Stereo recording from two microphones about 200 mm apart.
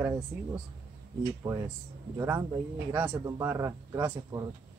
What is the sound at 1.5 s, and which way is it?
Speech, 20° right (ahead or behind).